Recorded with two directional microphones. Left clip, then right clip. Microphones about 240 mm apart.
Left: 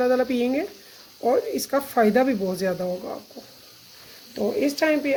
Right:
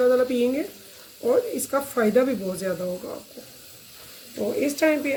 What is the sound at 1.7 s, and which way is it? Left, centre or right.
Speech, left.